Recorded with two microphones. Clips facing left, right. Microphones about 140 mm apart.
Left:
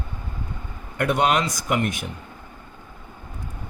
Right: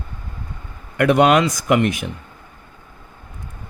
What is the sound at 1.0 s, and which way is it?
Speech, 90° right.